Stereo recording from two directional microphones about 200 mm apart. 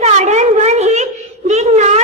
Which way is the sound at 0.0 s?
35° right (ahead or behind).